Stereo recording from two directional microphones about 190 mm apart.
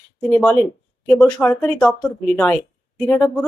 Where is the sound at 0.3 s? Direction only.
5° left (ahead or behind).